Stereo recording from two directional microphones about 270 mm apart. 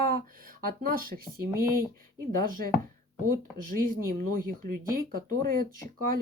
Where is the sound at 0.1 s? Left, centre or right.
Right.